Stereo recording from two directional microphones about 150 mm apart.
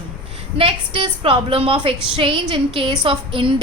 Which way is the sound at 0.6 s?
35° right (ahead or behind).